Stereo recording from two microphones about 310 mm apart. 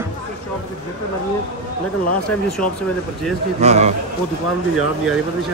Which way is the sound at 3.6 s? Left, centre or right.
Right.